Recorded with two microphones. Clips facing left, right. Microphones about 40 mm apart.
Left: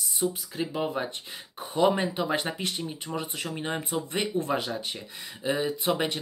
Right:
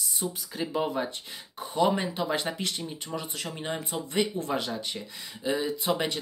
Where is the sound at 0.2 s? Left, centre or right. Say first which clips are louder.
Left 6 dB; centre.